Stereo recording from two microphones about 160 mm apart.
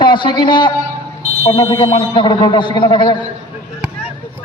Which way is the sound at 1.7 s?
30° left (ahead or behind).